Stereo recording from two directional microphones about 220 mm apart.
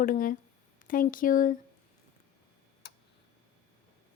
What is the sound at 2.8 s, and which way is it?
Tick, 45° left (ahead or behind).